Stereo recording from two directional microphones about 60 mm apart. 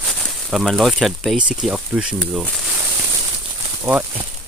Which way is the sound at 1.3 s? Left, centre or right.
Centre.